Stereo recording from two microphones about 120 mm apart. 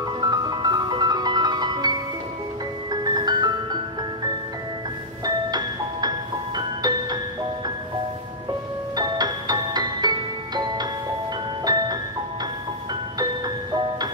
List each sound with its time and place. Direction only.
0.2 s music: 35° right (ahead or behind)
5.2 s music: 35° right (ahead or behind)
8.9 s music: 35° right (ahead or behind)